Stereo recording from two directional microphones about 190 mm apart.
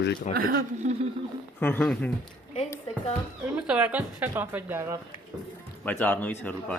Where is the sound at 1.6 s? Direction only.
10° left (ahead or behind).